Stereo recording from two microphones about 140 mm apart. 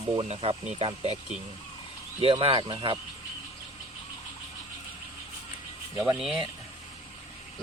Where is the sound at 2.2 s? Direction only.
45° right (ahead or behind).